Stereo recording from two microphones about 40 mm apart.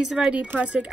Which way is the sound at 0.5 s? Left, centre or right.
Right.